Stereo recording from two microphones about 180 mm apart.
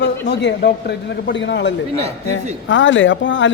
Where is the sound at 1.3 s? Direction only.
85° left.